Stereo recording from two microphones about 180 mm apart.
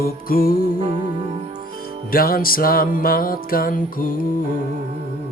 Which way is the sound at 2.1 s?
55° left (ahead or behind).